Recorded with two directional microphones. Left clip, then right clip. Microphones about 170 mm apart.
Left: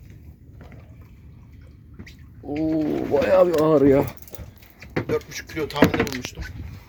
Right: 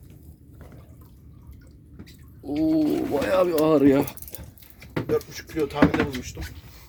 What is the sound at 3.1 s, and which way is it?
Speech, 40° left (ahead or behind).